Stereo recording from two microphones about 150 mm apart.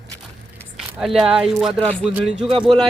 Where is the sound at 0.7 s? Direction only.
Centre (ahead or behind).